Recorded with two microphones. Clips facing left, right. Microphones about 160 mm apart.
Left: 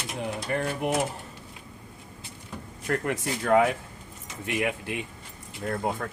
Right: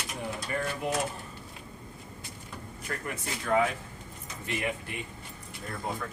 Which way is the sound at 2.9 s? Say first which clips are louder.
Left 9 dB; 65° left (ahead or behind).